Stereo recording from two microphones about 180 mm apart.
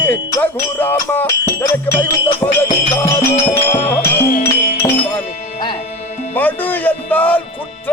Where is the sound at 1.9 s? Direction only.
35° left (ahead or behind).